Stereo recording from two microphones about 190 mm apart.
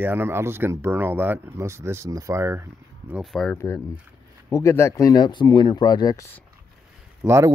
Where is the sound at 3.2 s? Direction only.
Centre (ahead or behind).